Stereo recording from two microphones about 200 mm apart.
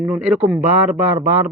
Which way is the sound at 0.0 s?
5° right (ahead or behind).